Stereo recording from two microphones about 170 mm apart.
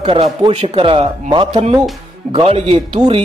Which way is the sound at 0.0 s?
30° right (ahead or behind).